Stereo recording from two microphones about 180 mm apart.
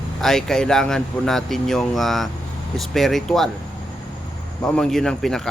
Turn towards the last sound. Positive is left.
turn(degrees=0)  # may be behind; listen again after turning